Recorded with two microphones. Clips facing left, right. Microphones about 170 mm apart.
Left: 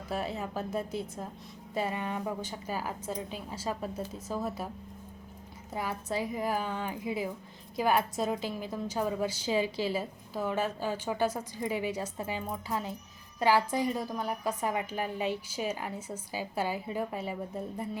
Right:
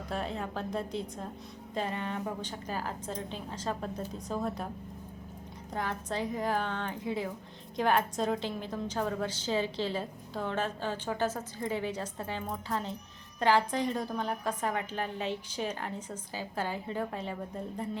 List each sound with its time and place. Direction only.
0.1 s a woman's voice: 5° left (ahead or behind)
5.7 s a woman's voice: 10° left (ahead or behind)